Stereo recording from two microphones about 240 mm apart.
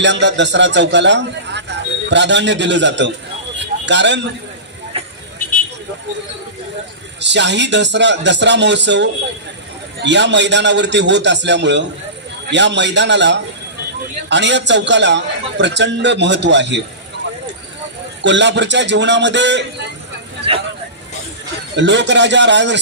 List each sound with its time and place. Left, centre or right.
0.0 s a man's voice: right
4.9 s vehicle: right
7.2 s a man's voice: right
18.2 s a man's voice: right
20.5 s vehicle: right
21.8 s a man's voice: right